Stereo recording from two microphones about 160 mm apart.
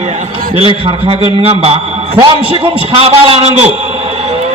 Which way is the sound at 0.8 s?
35° right (ahead or behind).